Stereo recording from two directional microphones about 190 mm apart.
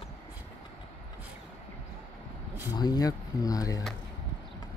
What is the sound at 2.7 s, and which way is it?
Speech, 20° left (ahead or behind).